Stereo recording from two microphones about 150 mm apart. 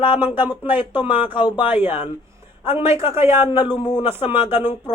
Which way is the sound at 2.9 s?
40° left (ahead or behind).